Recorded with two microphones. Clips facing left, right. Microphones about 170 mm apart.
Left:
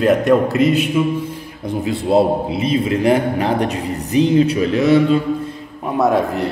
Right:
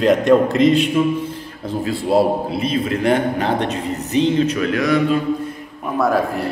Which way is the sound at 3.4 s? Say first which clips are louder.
Left 2 dB; 30° right (ahead or behind).